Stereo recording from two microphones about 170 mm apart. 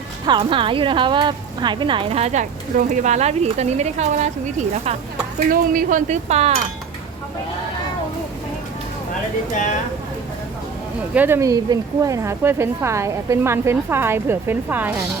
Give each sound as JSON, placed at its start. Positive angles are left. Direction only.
{"t": 0.3, "sound": "a woman's voice", "side_deg": -30}
{"t": 11.1, "sound": "speech", "side_deg": -10}